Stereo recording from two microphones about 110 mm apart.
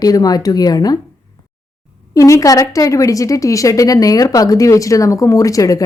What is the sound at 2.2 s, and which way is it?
A woman's voice, 30° left (ahead or behind).